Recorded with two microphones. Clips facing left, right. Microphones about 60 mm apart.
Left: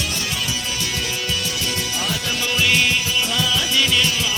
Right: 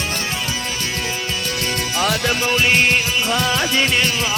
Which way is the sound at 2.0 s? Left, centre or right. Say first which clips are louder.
Right 8 dB; right.